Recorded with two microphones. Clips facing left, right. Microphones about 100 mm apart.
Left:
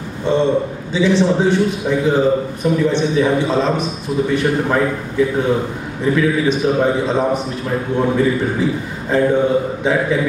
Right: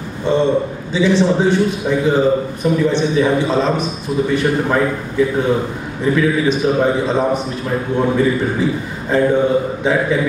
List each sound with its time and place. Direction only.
0.3 s a man's voice: 30° right (ahead or behind)